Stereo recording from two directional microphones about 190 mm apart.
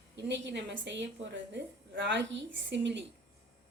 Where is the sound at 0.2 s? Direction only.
65° right (ahead or behind).